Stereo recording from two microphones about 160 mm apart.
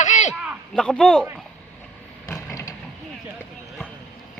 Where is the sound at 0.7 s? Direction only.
5° left (ahead or behind).